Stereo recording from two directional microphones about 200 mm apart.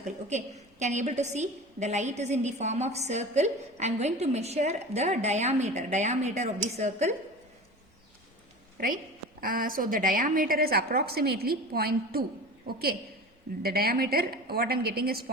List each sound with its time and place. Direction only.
0.3 s a woman's voice: 35° right (ahead or behind)
9.4 s a woman's voice: 45° right (ahead or behind)